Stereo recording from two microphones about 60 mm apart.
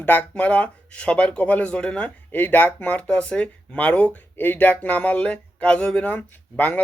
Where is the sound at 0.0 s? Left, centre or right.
Left.